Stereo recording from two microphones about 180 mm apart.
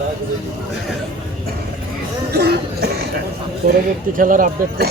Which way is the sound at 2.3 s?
65° right (ahead or behind).